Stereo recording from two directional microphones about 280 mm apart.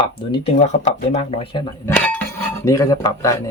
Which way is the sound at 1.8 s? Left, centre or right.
Centre.